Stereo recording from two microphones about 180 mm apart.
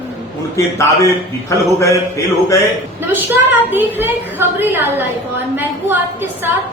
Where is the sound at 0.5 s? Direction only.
15° left (ahead or behind).